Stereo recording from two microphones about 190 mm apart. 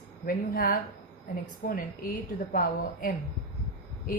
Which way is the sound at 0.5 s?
50° left (ahead or behind).